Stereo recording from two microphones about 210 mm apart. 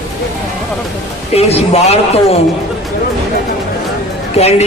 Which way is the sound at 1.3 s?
30° left (ahead or behind).